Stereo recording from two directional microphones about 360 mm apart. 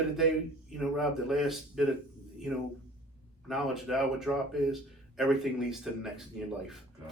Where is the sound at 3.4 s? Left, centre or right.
Centre.